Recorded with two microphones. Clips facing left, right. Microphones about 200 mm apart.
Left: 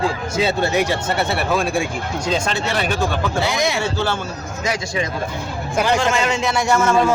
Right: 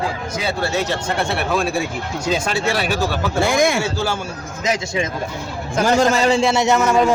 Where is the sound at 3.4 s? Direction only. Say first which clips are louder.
Right 7 dB; 50° right (ahead or behind).